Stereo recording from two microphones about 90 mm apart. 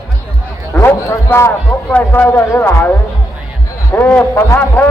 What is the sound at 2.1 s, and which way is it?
Speech, 20° left (ahead or behind).